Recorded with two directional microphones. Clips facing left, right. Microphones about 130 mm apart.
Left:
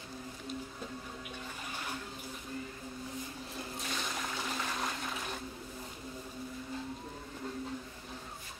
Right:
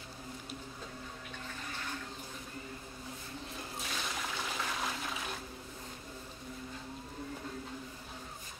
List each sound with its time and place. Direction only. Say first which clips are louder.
3.8 s toilet flush: left 1 dB; centre (ahead or behind)